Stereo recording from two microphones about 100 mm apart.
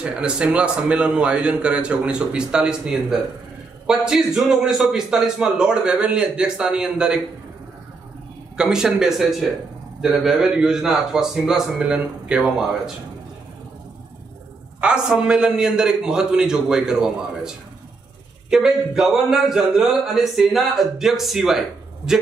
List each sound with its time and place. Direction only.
0.0 s a man's voice: 10° right (ahead or behind)
8.5 s speech: 5° right (ahead or behind)
14.8 s a man's voice: 10° right (ahead or behind)